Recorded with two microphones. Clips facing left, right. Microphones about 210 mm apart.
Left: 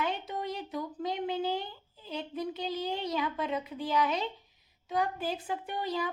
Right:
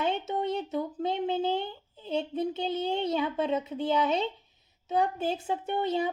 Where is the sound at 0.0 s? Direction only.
25° right (ahead or behind).